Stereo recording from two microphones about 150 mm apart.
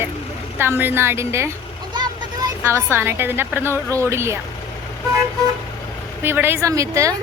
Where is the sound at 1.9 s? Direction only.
30° right (ahead or behind).